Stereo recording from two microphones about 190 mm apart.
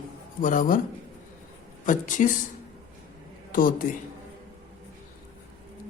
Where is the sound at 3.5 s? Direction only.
45° left (ahead or behind).